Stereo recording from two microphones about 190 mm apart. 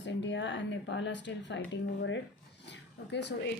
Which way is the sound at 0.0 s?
70° left (ahead or behind).